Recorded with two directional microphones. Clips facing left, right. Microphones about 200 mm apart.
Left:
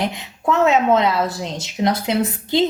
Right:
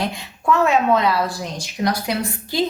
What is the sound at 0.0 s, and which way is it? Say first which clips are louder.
A woman's voice: left 2 dB; 20° left (ahead or behind).